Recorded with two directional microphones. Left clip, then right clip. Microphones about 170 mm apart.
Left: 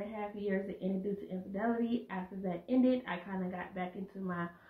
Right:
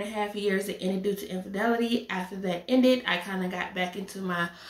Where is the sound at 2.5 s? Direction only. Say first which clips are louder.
Right 8 dB; 10° right (ahead or behind).